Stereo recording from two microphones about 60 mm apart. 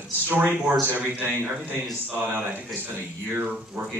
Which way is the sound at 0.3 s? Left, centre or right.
Right.